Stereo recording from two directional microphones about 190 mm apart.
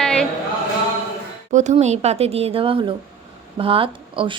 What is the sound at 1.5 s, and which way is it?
Speech, 40° right (ahead or behind).